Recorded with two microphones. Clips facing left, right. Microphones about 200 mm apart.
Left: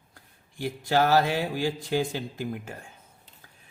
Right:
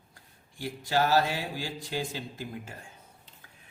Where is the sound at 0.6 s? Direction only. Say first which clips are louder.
Left 4 dB; 55° left (ahead or behind).